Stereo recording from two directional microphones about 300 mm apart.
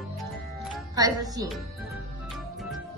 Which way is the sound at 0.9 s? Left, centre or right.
Centre.